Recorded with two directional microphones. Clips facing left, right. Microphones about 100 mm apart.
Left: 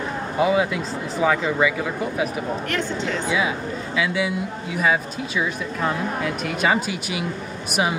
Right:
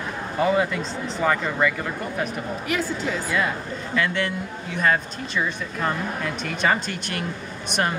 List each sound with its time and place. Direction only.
0.4 s speech: 5° left (ahead or behind)
2.7 s speech: 5° right (ahead or behind)